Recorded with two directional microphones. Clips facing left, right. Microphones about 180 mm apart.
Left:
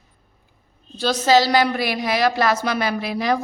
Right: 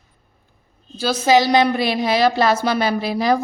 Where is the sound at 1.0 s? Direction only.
5° right (ahead or behind); by 3.4 s 35° right (ahead or behind).